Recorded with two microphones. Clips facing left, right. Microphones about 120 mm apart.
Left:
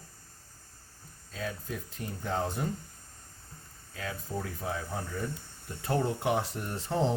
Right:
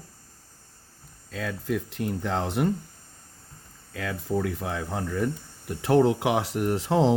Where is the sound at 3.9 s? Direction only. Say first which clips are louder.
Right 8 dB; 70° right (ahead or behind).